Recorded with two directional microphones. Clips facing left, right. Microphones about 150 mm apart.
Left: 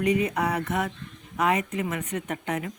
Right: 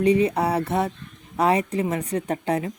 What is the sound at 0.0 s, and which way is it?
A woman's voice, 30° right (ahead or behind).